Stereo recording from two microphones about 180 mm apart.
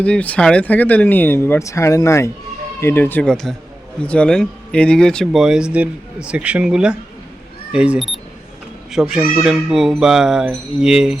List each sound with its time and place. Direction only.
0.0 s speech: 5° left (ahead or behind)